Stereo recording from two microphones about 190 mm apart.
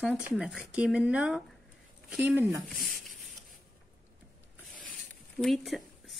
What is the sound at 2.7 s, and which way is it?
Speech, 50° left (ahead or behind).